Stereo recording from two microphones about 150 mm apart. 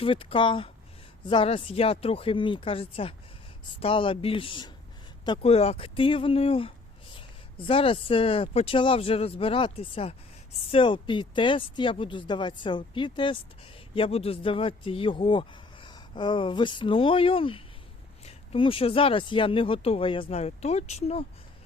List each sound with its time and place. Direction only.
0.0 s a man's voice: 35° left (ahead or behind)